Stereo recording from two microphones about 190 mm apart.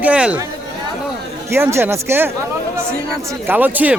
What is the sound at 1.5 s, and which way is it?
Speech, 15° right (ahead or behind).